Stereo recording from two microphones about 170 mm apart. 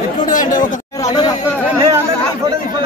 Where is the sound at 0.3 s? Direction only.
50° left (ahead or behind).